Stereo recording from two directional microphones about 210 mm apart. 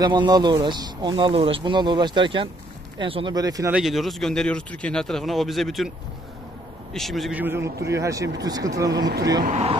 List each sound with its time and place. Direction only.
0.0 s speech: 20° right (ahead or behind)
3.7 s speech: centre (ahead or behind)
6.9 s a man's voice: centre (ahead or behind); by 9.1 s 15° right (ahead or behind)
9.4 s speech: 30° right (ahead or behind)